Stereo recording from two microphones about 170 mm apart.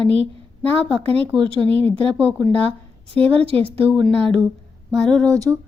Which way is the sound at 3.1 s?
35° right (ahead or behind).